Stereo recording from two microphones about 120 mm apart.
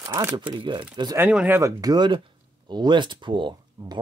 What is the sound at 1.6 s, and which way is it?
Speech, 30° right (ahead or behind).